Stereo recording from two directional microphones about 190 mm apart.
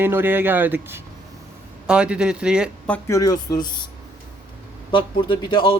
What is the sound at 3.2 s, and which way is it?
Speech, 20° left (ahead or behind).